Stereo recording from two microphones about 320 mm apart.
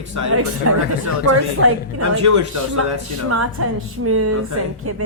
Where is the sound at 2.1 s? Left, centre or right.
Right.